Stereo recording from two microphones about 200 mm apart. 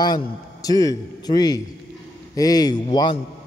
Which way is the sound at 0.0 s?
20° left (ahead or behind).